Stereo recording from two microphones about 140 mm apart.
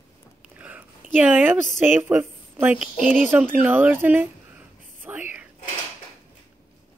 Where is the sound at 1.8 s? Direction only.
15° right (ahead or behind).